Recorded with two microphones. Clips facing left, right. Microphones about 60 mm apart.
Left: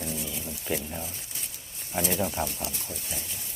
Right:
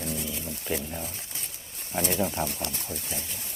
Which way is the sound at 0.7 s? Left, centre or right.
Centre.